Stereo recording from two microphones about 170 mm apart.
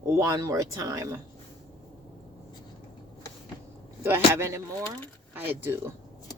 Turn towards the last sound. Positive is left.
turn(degrees=-10)  # may be behind; listen again after turning